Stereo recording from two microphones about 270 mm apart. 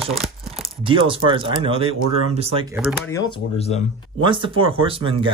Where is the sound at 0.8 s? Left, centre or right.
Centre.